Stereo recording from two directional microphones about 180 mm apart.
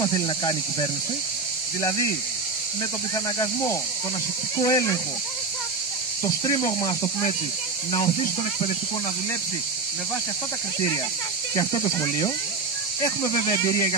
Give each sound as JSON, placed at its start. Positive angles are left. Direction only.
{"t": 0.0, "sound": "speech", "side_deg": 25}
{"t": 4.6, "sound": "speech", "side_deg": 20}
{"t": 6.2, "sound": "speech", "side_deg": 20}
{"t": 11.5, "sound": "speech", "side_deg": 25}